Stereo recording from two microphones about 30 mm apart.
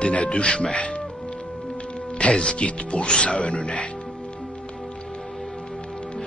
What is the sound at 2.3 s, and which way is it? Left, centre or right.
Speech, left.